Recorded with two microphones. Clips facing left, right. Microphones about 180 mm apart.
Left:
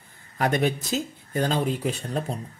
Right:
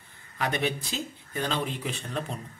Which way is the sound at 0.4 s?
45° left (ahead or behind).